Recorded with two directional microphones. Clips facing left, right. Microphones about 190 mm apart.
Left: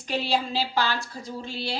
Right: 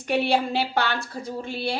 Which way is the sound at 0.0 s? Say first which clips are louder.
Right 4 dB; 60° right (ahead or behind).